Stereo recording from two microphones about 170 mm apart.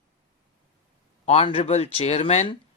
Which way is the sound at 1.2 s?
35° left (ahead or behind).